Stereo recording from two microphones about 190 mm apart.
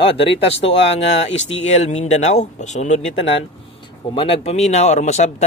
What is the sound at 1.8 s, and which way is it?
Speech, 35° left (ahead or behind).